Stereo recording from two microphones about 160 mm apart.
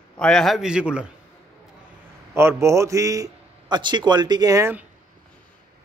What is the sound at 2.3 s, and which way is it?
A man's voice, 15° right (ahead or behind).